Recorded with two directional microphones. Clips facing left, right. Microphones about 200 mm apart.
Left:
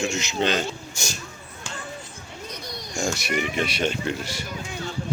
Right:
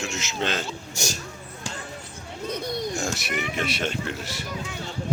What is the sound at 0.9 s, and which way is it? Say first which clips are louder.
Speech: right 3 dB; 40° right (ahead or behind).